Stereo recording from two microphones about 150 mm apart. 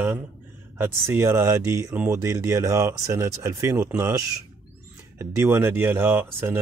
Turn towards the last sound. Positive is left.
turn(degrees=-15)  # may be behind; listen again after turning